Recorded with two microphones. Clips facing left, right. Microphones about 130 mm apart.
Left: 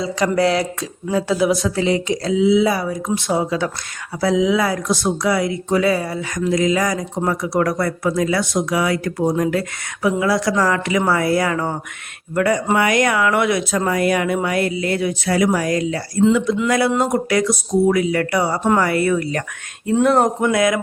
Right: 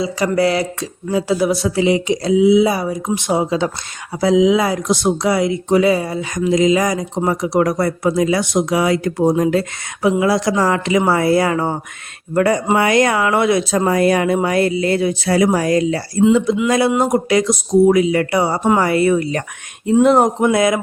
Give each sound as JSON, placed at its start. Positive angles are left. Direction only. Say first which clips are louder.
{"t": 0.0, "sound": "a sound", "louder": "right 1 dB", "side_deg": -5}
{"t": 1.6, "sound": "speech", "louder": "right 3 dB", "side_deg": -10}
{"t": 16.9, "sound": "speech", "louder": "right 3 dB", "side_deg": -10}
{"t": 20.5, "sound": "speech", "louder": "right 2 dB", "side_deg": -25}